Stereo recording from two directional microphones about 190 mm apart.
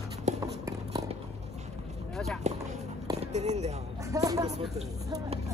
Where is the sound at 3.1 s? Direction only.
35° right (ahead or behind).